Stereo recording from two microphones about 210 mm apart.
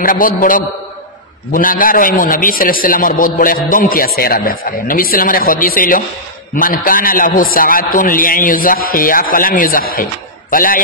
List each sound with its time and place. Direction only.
0.0 s a man's voice: 40° left (ahead or behind)